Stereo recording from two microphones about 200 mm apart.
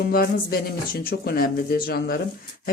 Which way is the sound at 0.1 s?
50° left (ahead or behind).